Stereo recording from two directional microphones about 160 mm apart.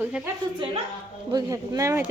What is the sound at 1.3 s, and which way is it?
Speech, 25° right (ahead or behind).